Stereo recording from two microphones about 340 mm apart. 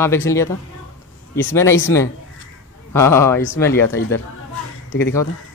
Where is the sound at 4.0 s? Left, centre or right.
Left.